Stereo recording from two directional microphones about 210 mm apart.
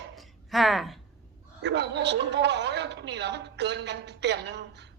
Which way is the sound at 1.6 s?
55° right (ahead or behind).